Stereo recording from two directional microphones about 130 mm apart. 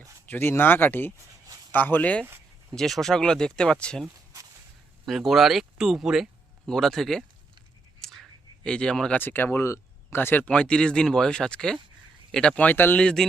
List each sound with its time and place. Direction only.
0.3 s speech: 15° left (ahead or behind)
5.0 s speech: centre (ahead or behind)